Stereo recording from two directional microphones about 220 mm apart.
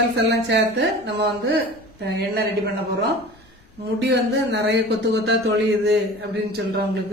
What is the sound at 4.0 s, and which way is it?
Speech, 50° right (ahead or behind).